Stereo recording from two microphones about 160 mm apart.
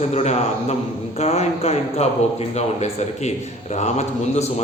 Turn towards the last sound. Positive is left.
turn(degrees=45)  # may be behind; listen again after turning